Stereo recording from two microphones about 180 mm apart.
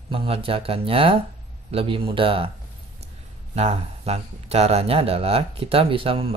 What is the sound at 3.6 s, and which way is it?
Speech, 35° right (ahead or behind).